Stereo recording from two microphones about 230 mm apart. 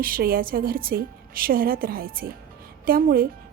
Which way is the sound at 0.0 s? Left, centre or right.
Right.